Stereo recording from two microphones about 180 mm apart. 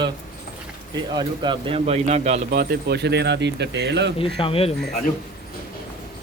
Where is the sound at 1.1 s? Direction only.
25° right (ahead or behind).